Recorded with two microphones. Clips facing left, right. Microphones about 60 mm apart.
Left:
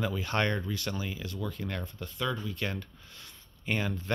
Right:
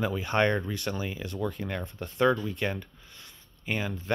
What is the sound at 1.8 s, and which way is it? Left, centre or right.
Speech, right.